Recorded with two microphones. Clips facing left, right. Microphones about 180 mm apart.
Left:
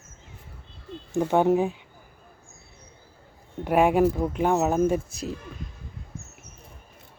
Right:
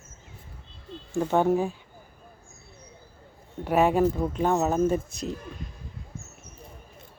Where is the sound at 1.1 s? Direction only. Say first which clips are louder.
Left 2 dB; 15° left (ahead or behind).